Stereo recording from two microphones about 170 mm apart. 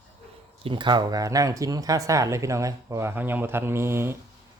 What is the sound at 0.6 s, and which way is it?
Speech, 30° right (ahead or behind).